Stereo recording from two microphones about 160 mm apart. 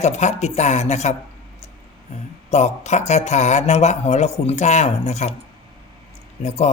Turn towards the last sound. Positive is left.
turn(degrees=45)  # may be behind; listen again after turning